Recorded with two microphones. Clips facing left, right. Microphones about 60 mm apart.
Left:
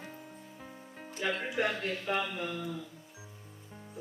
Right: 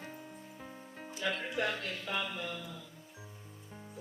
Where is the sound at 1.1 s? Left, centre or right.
Left.